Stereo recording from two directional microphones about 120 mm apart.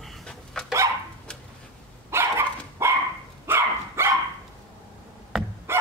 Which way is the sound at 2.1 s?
20° right (ahead or behind).